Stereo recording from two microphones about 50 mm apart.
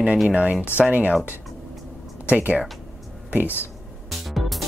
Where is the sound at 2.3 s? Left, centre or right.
Right.